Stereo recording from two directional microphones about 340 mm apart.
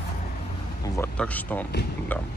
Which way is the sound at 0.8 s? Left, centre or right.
Centre.